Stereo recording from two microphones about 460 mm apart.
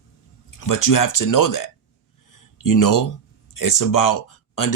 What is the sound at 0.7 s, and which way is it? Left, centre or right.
Speech, left.